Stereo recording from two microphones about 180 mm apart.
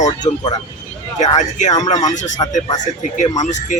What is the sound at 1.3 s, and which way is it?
Speech, 40° left (ahead or behind).